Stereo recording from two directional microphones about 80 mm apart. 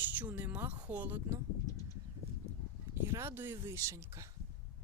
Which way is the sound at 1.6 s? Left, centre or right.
Left.